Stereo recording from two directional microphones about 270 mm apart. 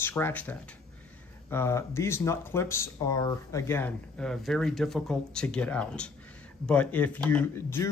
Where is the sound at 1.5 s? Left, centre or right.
Centre.